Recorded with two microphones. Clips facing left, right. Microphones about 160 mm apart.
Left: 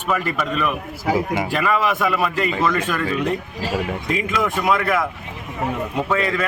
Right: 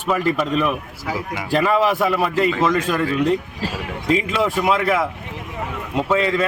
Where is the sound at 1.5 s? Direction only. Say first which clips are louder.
Right 3 dB; 35° right (ahead or behind).